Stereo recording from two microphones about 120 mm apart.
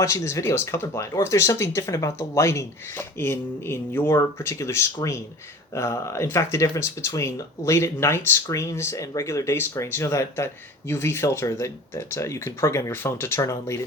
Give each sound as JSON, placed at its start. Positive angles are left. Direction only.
{"t": 0.0, "sound": "speech", "side_deg": 25}